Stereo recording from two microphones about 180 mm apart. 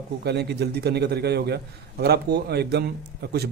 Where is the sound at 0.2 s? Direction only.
65° right (ahead or behind).